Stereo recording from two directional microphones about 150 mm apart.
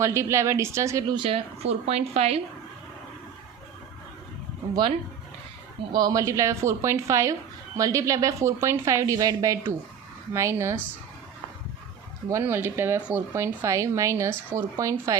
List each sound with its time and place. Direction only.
0.0 s speech: 20° right (ahead or behind)
1.1 s speech: 35° right (ahead or behind)
4.7 s speech: 35° right (ahead or behind)
12.3 s speech: 15° right (ahead or behind)